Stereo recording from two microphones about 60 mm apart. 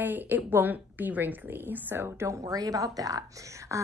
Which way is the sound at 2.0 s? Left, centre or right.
Right.